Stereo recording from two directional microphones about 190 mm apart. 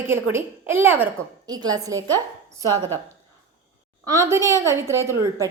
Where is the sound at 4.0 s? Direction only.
15° right (ahead or behind).